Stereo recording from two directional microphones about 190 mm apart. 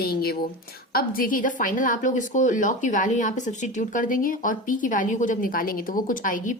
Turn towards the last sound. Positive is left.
turn(degrees=45)  # may be behind; listen again after turning